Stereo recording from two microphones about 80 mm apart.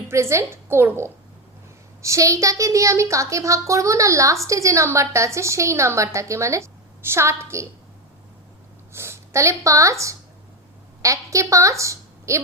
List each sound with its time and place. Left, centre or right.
0.1 s a woman's voice: right
8.9 s a woman's voice: right